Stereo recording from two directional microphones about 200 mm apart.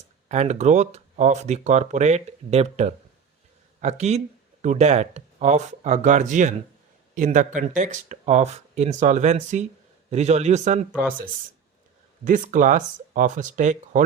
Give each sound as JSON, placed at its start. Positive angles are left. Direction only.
{"t": 0.3, "sound": "speech", "side_deg": -35}
{"t": 12.2, "sound": "speech", "side_deg": -40}